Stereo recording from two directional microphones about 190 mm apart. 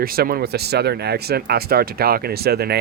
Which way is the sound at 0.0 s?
50° right (ahead or behind).